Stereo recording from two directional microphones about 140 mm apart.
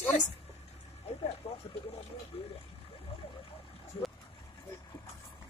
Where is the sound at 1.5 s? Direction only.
45° left (ahead or behind).